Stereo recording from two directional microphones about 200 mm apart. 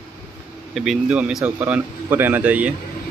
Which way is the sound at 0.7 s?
Centre (ahead or behind).